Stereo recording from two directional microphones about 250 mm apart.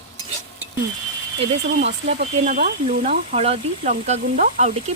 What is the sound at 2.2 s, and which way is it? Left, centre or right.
Speech, right.